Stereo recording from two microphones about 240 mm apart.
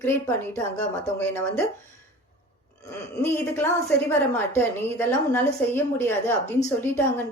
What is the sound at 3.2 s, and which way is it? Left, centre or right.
Speech, centre.